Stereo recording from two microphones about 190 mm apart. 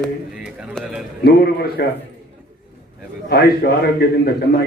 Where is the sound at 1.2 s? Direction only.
55° left (ahead or behind).